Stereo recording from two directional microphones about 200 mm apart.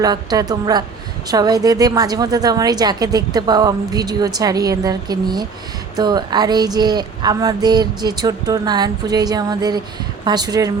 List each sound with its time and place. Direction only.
0.0 s a woman's voice: 20° right (ahead or behind)